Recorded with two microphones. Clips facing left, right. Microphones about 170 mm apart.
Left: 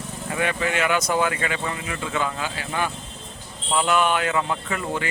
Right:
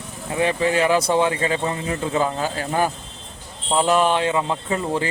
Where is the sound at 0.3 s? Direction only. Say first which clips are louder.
Right 5 dB; 30° right (ahead or behind).